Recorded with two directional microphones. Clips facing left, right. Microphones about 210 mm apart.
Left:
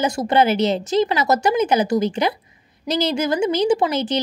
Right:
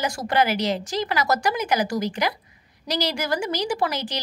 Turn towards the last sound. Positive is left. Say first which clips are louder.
# left 7 dB
turn(degrees=20)  # may be behind; listen again after turning